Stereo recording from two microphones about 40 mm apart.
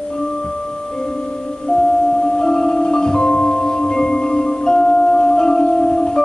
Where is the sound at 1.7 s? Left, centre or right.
Centre.